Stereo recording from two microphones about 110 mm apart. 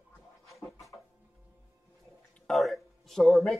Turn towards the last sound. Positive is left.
turn(degrees=0)  # may be behind; listen again after turning